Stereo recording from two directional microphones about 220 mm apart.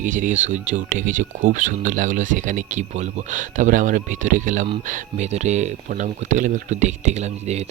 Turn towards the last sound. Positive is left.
turn(degrees=-30)  # may be behind; listen again after turning